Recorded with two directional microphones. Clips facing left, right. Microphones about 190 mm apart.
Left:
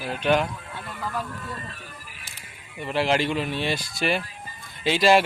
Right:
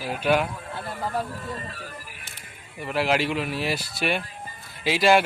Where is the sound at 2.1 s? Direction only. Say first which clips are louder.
Right 2 dB; 50° right (ahead or behind).